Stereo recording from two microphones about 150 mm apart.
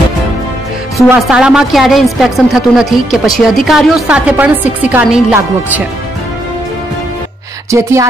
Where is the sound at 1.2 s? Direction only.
5° right (ahead or behind).